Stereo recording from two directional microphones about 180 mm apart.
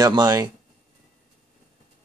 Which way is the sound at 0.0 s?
20° right (ahead or behind).